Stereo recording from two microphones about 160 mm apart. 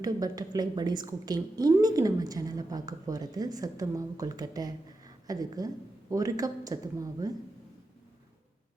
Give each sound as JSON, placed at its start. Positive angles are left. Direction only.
{"t": 0.0, "sound": "a woman's voice", "side_deg": -25}